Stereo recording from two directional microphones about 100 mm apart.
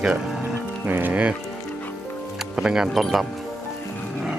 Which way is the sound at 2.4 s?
5° right (ahead or behind).